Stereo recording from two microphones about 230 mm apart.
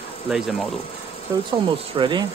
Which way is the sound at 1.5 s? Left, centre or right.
Right.